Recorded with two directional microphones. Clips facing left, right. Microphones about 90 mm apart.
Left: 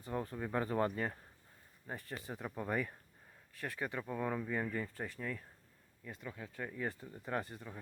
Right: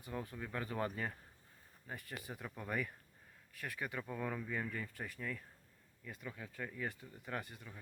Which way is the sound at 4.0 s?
10° left (ahead or behind).